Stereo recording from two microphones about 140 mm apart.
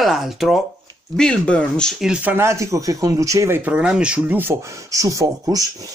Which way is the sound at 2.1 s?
10° right (ahead or behind).